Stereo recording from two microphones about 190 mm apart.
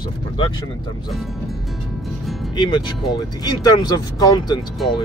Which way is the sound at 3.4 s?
20° left (ahead or behind).